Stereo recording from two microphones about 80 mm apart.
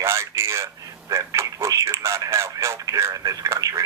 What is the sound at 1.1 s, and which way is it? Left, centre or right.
Speech, right.